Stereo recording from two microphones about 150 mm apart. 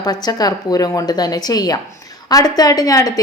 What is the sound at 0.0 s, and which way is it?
Speech, 25° left (ahead or behind).